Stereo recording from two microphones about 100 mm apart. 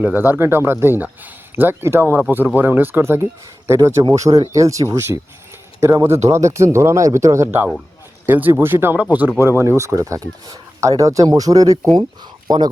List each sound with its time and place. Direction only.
0.0 s speech: 15° right (ahead or behind); by 12.0 s 40° right (ahead or behind)